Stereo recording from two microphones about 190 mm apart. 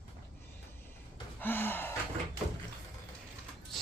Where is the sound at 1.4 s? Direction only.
10° left (ahead or behind).